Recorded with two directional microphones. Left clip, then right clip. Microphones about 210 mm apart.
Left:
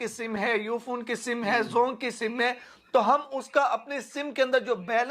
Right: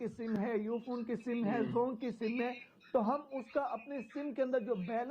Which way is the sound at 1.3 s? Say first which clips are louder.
Left 10 dB; 15° left (ahead or behind).